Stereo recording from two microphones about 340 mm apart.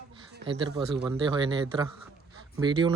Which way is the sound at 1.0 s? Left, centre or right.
Centre.